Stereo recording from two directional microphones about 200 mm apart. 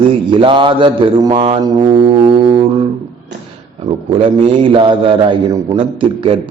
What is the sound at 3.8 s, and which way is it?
Speech, 30° right (ahead or behind).